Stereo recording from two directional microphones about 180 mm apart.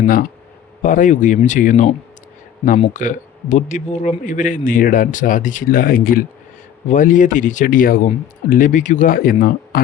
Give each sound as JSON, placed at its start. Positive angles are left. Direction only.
{"t": 0.8, "sound": "speech", "side_deg": 45}
{"t": 2.9, "sound": "speech", "side_deg": 45}